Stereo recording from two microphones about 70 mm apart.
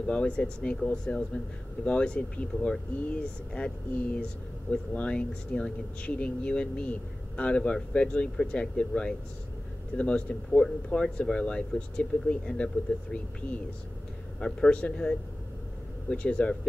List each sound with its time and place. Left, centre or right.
0.0 s speech: centre
1.9 s speech: centre
14.4 s speech: centre